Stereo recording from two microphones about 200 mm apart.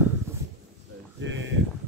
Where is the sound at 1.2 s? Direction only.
70° right (ahead or behind).